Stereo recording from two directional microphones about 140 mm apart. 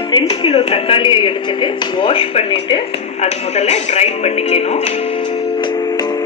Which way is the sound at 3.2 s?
50° left (ahead or behind).